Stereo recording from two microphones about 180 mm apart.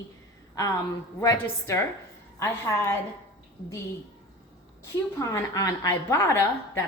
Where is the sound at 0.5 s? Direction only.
20° left (ahead or behind).